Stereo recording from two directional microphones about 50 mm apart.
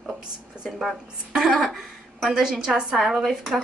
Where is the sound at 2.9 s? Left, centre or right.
Centre.